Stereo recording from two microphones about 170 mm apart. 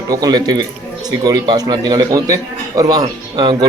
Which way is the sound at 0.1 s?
25° right (ahead or behind).